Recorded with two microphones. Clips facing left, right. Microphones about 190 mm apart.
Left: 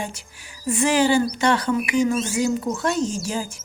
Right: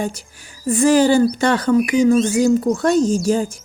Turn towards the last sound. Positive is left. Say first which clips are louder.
# right 9 dB
turn(degrees=-35)  # may be behind; listen again after turning